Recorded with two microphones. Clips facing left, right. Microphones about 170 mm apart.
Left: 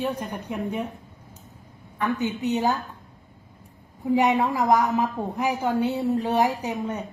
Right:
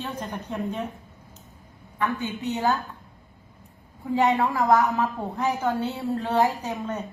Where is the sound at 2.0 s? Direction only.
20° left (ahead or behind).